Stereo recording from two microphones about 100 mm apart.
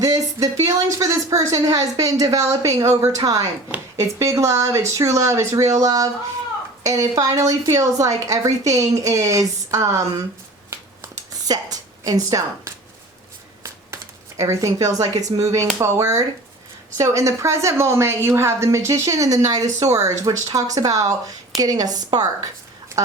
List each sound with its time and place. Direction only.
0.0 s a woman's voice: 35° right (ahead or behind)
10.7 s a sound: 35° right (ahead or behind)
13.6 s a woman's voice: 30° right (ahead or behind)